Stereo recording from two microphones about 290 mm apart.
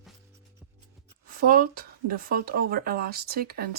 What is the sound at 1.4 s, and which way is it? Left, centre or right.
Speech, right.